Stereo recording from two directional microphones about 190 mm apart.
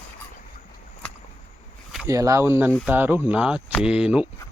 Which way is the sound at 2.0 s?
15° right (ahead or behind).